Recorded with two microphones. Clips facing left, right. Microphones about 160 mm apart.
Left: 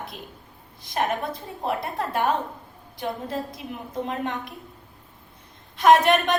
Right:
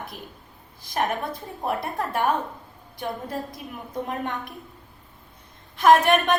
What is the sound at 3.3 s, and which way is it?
A woman's voice, 25° left (ahead or behind).